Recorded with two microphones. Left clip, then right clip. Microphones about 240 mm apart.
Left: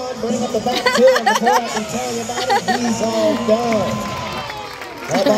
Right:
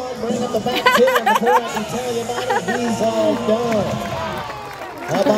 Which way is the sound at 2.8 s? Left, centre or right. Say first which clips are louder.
Even; right.